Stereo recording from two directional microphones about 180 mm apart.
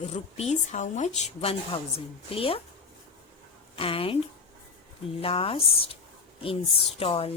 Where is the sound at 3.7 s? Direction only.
30° left (ahead or behind).